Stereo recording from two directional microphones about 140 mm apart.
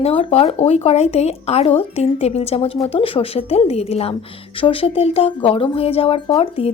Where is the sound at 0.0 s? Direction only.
45° left (ahead or behind).